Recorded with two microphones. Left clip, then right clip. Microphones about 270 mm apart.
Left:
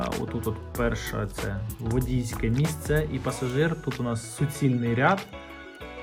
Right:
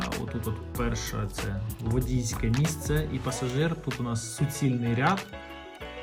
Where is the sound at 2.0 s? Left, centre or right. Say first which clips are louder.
Left 1 dB; left.